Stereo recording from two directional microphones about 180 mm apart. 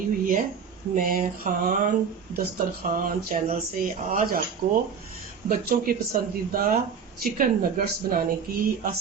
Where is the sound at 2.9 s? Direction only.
50° right (ahead or behind).